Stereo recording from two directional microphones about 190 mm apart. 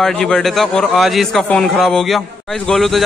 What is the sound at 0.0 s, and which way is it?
A man's voice, 5° left (ahead or behind).